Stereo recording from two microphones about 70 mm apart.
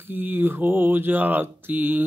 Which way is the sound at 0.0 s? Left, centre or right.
Right.